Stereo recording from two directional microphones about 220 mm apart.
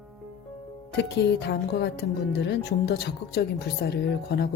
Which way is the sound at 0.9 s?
50° left (ahead or behind).